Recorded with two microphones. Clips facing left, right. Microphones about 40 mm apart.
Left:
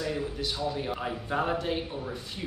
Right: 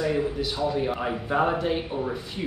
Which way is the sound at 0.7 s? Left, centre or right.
Centre.